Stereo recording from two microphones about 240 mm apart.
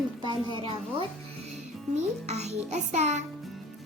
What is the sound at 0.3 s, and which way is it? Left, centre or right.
Speech, centre.